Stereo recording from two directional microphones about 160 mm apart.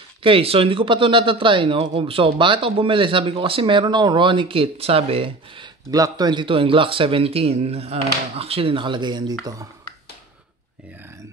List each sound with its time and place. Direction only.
0.2 s speech: 35° right (ahead or behind)